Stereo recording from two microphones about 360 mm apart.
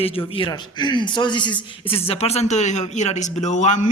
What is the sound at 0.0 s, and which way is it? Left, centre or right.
Speech, centre.